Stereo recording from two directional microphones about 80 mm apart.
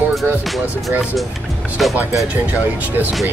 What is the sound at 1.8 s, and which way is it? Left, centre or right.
Speech, centre.